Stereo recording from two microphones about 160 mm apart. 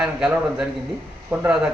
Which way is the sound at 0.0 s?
5° right (ahead or behind).